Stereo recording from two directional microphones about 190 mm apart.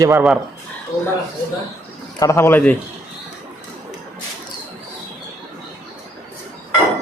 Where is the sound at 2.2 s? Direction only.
15° left (ahead or behind).